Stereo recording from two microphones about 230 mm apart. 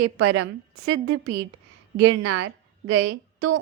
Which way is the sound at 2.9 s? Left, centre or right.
Right.